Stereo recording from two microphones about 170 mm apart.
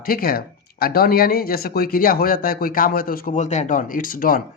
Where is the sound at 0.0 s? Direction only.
60° left (ahead or behind).